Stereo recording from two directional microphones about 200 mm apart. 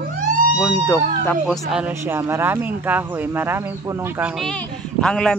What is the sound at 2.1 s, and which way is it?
Speech, 10° right (ahead or behind).